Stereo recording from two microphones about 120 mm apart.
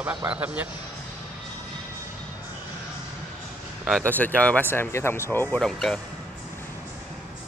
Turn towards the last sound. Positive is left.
turn(degrees=5)  # may be behind; listen again after turning